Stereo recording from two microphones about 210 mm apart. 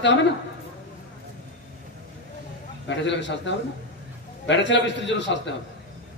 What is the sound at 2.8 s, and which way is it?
A man's voice, 60° left (ahead or behind).